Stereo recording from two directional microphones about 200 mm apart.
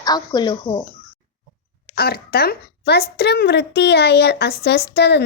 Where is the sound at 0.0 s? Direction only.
20° left (ahead or behind).